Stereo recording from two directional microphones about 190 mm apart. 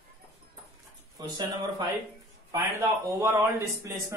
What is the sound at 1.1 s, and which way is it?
Speech, 20° right (ahead or behind).